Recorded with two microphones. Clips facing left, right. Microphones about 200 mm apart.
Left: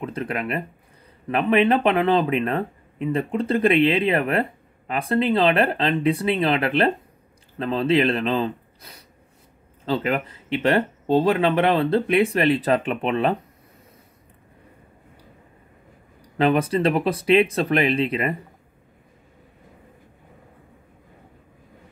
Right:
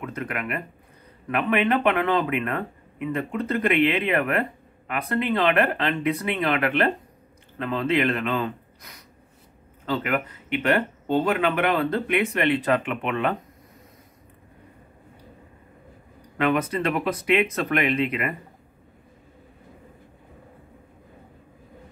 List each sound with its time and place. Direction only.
0.0 s speech: 30° left (ahead or behind)
16.3 s speech: 30° left (ahead or behind)